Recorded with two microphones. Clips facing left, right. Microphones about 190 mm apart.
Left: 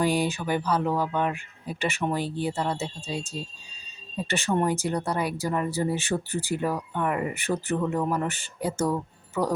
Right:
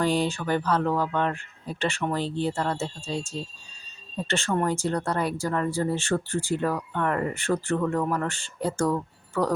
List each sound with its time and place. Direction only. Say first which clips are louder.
0.0 s speech: even; 10° left (ahead or behind)
2.8 s speech: right 1 dB; centre (ahead or behind)
4.3 s speech: left 1 dB; 15° left (ahead or behind)